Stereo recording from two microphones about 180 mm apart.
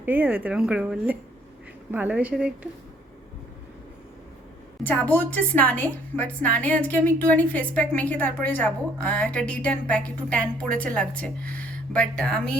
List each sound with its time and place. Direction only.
0.0 s speech: 10° right (ahead or behind)
4.8 s a woman's voice: 10° left (ahead or behind)